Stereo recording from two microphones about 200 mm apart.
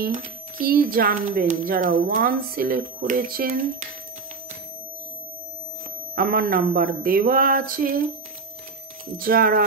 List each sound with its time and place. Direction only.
0.7 s a woman's voice: 45° right (ahead or behind)
6.1 s a woman's voice: 50° right (ahead or behind)
9.2 s a woman's voice: 45° right (ahead or behind)